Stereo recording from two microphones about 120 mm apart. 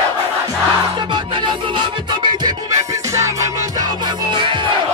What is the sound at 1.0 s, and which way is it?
Music, 40° right (ahead or behind).